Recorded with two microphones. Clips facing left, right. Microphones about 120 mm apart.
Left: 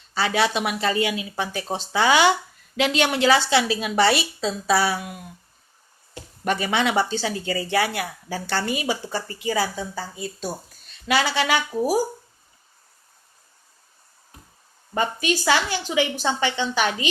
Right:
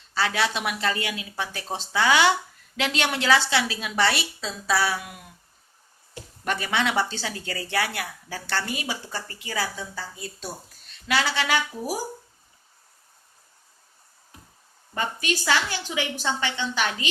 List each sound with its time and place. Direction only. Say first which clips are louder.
0.1 s speech: left 3 dB; 10° left (ahead or behind)
4.4 s a sound: left 4 dB; 20° left (ahead or behind)
6.4 s speech: left 3 dB; 10° left (ahead or behind)
14.9 s speech: left 5 dB; 20° left (ahead or behind)